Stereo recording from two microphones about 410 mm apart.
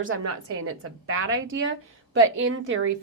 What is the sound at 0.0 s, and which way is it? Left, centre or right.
A woman's voice, right.